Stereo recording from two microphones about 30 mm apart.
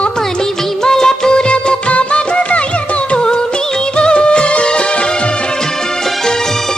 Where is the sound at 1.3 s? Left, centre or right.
Left.